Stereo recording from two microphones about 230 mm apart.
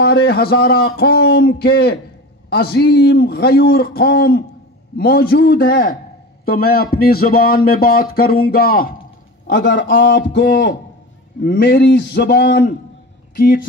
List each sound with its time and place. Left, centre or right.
0.0 s a man's voice: left
9.5 s a man's voice: left